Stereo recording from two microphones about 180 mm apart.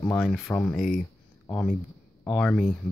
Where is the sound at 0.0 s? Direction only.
5° left (ahead or behind).